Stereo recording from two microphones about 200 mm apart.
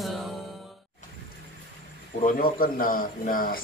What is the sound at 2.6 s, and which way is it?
Speech, 45° left (ahead or behind).